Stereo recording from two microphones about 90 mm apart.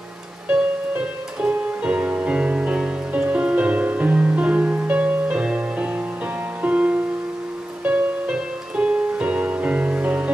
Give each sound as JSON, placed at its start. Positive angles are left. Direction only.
{"t": 0.5, "sound": "music", "side_deg": -15}